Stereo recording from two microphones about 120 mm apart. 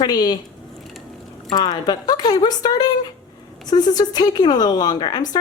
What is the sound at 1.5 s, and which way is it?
A woman's voice, 35° left (ahead or behind).